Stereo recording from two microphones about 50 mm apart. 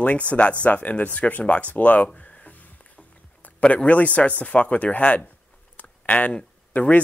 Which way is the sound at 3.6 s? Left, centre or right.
Left.